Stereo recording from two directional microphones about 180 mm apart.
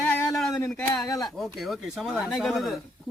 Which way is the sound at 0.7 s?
5° left (ahead or behind).